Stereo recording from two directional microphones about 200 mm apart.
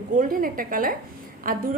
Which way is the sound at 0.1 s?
45° right (ahead or behind).